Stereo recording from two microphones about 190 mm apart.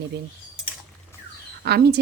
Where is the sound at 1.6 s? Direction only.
60° right (ahead or behind).